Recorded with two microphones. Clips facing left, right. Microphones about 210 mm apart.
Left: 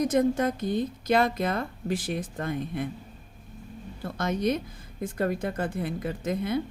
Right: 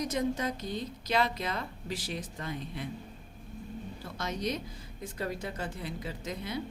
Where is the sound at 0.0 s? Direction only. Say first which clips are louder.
Left 8 dB; 50° left (ahead or behind).